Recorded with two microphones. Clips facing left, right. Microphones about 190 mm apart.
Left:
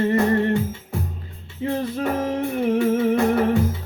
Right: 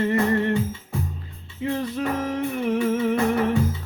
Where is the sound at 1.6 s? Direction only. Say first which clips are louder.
Left 2 dB; 35° left (ahead or behind).